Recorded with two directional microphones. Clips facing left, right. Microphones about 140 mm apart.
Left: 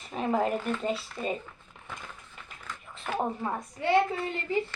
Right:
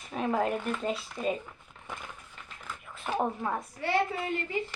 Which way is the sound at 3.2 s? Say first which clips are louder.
Even; 5° right (ahead or behind).